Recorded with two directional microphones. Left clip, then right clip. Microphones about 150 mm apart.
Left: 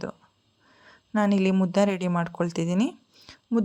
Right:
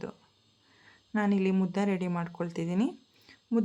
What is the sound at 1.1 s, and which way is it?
Speech, 35° left (ahead or behind).